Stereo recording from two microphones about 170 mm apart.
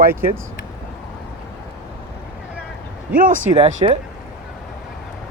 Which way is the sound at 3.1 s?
55° right (ahead or behind).